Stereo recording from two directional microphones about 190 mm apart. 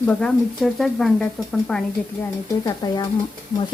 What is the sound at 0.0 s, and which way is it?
Speech, 5° left (ahead or behind).